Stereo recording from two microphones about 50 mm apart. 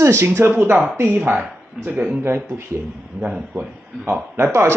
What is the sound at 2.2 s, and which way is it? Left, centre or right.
Speech, right.